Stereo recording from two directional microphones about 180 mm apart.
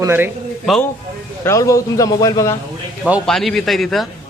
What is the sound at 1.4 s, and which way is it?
A man's voice, 15° left (ahead or behind).